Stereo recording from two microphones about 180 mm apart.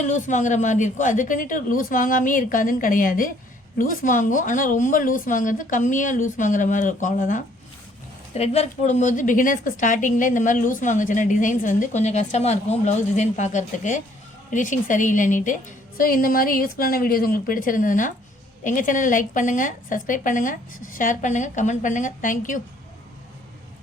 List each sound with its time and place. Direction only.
0.0 s a woman's voice: 45° left (ahead or behind)